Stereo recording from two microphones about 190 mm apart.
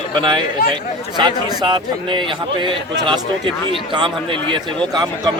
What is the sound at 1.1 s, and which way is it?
A man's voice, 25° right (ahead or behind).